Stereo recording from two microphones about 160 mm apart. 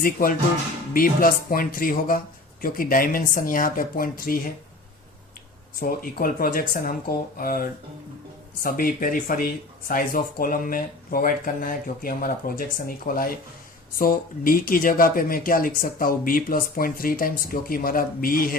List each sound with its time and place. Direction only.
0.0 s speech: 65° left (ahead or behind)
5.8 s speech: 65° left (ahead or behind)